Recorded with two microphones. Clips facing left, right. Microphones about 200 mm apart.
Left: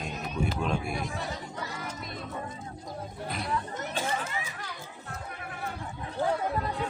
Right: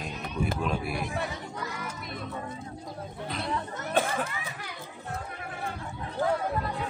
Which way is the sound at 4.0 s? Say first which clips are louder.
Right 7 dB; 55° right (ahead or behind).